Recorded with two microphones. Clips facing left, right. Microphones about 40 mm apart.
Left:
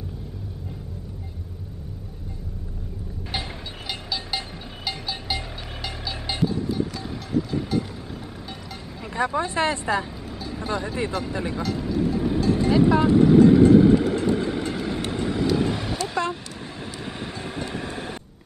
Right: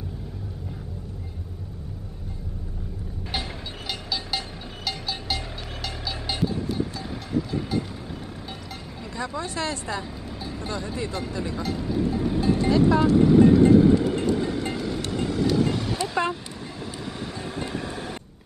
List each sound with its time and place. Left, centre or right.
4.1 s a sound: centre
9.1 s speech: left
11.6 s speech: centre
12.0 s vehicle: centre
12.6 s speech: centre
13.5 s vehicle: left
16.0 s vehicle: centre
16.8 s vehicle: left